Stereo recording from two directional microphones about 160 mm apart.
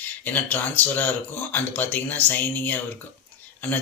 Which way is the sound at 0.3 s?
10° left (ahead or behind).